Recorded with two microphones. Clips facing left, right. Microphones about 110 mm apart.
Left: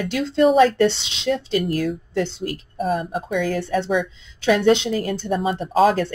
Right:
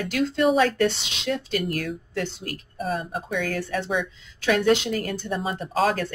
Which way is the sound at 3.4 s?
30° left (ahead or behind).